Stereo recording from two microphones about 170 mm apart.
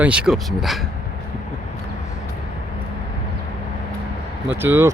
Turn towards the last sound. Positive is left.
turn(degrees=-15)  # may be behind; listen again after turning